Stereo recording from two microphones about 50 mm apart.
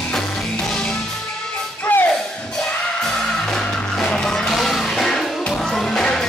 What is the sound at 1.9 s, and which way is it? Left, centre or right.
Music, left.